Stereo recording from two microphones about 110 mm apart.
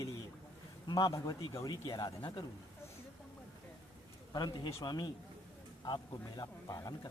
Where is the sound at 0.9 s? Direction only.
30° left (ahead or behind).